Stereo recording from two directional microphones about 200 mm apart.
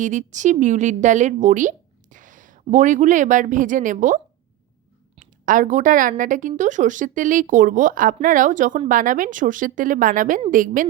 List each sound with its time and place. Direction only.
0.0 s speech: 40° right (ahead or behind)
5.2 s a woman's voice: 40° right (ahead or behind)